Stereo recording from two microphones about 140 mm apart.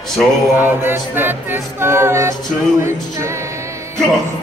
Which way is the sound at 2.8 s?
20° right (ahead or behind).